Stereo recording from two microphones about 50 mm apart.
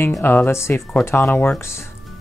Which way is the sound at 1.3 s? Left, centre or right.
Left.